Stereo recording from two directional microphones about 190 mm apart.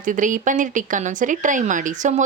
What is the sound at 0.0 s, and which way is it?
Speech, 45° right (ahead or behind).